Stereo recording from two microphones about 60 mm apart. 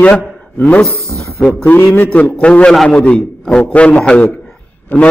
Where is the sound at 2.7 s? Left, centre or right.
Centre.